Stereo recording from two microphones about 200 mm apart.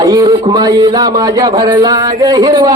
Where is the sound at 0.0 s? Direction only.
15° right (ahead or behind).